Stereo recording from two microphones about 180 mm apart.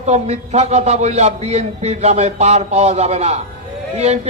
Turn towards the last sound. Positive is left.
turn(degrees=-40)  # may be behind; listen again after turning